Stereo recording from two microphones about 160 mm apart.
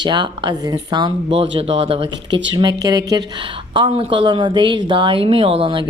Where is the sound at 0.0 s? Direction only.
30° right (ahead or behind).